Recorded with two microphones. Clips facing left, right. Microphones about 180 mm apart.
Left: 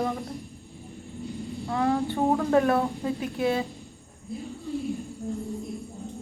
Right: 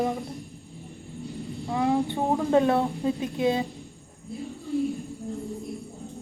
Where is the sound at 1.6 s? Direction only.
15° right (ahead or behind).